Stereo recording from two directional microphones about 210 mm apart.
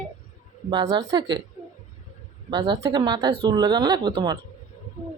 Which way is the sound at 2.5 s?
20° right (ahead or behind).